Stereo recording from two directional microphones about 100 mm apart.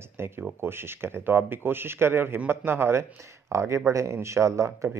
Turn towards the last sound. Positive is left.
turn(degrees=-30)  # may be behind; listen again after turning